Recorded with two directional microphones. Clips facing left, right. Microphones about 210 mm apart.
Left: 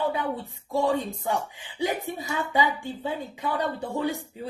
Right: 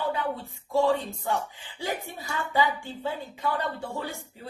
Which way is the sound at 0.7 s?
15° left (ahead or behind).